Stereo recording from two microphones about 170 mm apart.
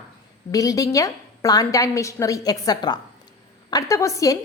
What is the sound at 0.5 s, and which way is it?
A woman's voice, 20° left (ahead or behind).